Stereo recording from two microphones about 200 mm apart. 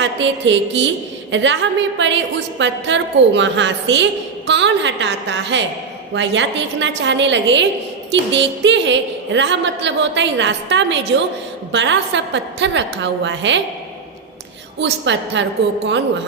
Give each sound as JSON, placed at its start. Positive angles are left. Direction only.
{"t": 0.0, "sound": "a woman's voice", "side_deg": -65}
{"t": 14.8, "sound": "a woman's voice", "side_deg": -60}